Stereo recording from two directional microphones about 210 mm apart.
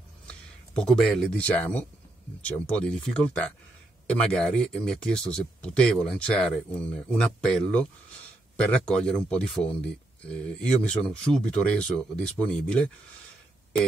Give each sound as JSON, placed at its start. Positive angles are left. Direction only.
{"t": 0.3, "sound": "speech", "side_deg": 5}